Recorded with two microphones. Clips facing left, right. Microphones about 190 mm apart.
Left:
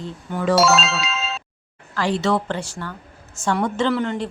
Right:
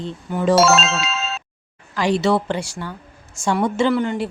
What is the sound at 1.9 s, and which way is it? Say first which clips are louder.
A woman's voice: right 3 dB; 15° right (ahead or behind).